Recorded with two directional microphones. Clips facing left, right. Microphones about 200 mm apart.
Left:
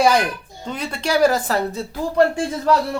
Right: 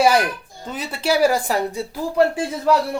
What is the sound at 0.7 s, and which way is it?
Speech, 5° right (ahead or behind).